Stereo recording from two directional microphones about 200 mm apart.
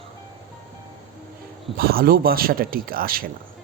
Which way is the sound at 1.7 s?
50° right (ahead or behind).